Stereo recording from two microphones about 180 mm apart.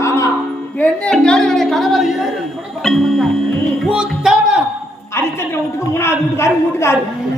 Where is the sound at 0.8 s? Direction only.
5° left (ahead or behind).